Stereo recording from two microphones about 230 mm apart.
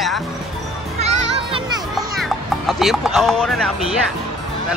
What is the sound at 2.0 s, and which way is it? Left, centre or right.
Music, centre.